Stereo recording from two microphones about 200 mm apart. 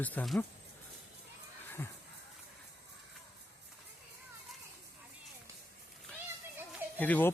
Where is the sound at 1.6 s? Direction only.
10° left (ahead or behind).